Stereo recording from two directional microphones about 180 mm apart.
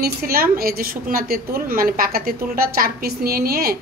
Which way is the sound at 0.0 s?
55° right (ahead or behind).